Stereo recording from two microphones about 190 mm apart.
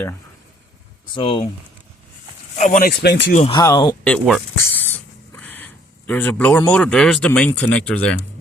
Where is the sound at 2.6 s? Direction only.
40° left (ahead or behind).